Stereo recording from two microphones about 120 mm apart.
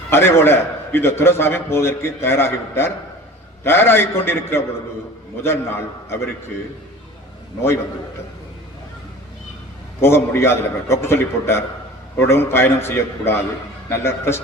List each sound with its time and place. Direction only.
0.1 s a man's voice: 20° left (ahead or behind)
10.0 s a man's voice: 20° left (ahead or behind)